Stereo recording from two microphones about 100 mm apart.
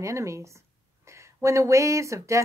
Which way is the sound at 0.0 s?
30° right (ahead or behind).